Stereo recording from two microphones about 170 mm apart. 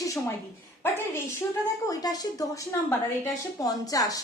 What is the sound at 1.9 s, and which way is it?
A woman's voice, 20° left (ahead or behind).